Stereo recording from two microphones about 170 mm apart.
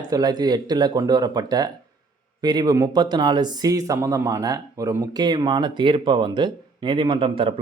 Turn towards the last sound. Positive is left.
turn(degrees=-30)  # may be behind; listen again after turning